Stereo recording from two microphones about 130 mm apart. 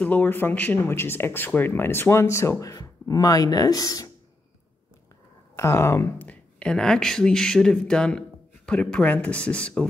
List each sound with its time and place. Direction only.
0.0 s speech: 15° left (ahead or behind)
5.6 s speech: 20° left (ahead or behind)